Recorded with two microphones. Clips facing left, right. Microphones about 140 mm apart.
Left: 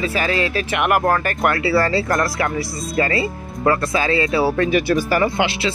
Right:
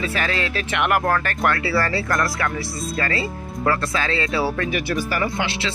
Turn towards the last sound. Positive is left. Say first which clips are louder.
# left 5 dB
turn(degrees=10)  # may be behind; listen again after turning